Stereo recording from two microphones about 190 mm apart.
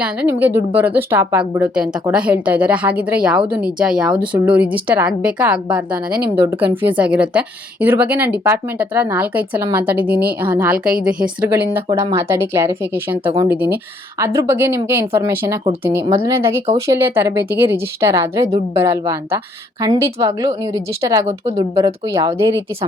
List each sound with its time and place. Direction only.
0.0 s a woman's voice: 10° right (ahead or behind)
11.9 s a woman's voice: 20° right (ahead or behind)